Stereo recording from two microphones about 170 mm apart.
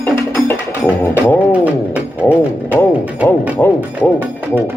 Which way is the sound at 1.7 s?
10° right (ahead or behind).